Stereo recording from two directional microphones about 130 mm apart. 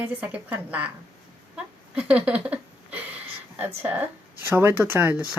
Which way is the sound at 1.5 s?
10° right (ahead or behind).